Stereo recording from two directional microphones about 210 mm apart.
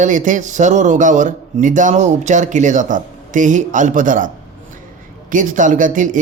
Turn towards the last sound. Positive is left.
turn(degrees=-40)  # may be behind; listen again after turning